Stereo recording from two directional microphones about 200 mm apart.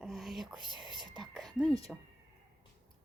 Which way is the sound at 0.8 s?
25° right (ahead or behind).